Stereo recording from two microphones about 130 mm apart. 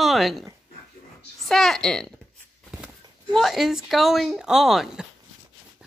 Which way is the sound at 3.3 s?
Centre (ahead or behind).